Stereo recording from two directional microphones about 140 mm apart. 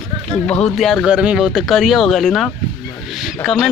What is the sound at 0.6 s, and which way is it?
Speech, centre (ahead or behind).